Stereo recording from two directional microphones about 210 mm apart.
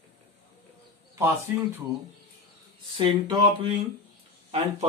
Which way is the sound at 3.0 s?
20° right (ahead or behind).